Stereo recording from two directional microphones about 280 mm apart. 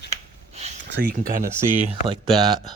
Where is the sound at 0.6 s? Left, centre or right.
Right.